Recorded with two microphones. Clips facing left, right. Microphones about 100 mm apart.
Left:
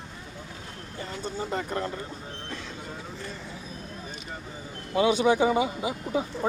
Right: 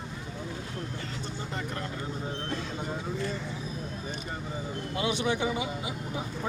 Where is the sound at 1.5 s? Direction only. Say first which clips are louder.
Left 5 dB; 30° left (ahead or behind).